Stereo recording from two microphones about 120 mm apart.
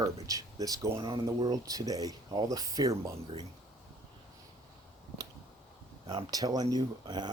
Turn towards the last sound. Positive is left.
turn(degrees=-35)  # may be behind; listen again after turning